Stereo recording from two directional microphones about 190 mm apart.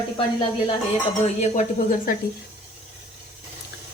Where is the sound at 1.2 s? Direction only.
35° left (ahead or behind).